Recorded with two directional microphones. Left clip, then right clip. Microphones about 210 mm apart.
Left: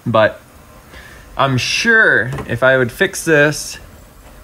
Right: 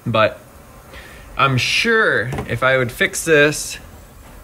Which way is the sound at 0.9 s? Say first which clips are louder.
Even; 5° left (ahead or behind).